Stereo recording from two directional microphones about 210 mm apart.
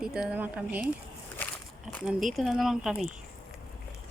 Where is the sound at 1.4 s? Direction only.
10° left (ahead or behind).